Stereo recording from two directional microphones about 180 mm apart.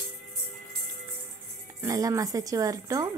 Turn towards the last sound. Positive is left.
turn(degrees=-20)  # may be behind; listen again after turning